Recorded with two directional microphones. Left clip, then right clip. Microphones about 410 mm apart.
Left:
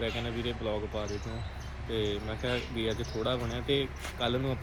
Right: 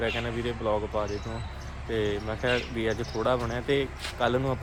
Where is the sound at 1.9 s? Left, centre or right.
Centre.